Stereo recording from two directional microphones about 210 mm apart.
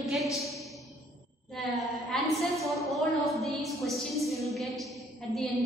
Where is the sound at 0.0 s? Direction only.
Centre (ahead or behind).